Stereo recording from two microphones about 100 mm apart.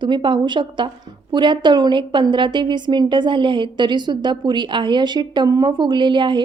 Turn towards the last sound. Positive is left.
turn(degrees=-50)  # may be behind; listen again after turning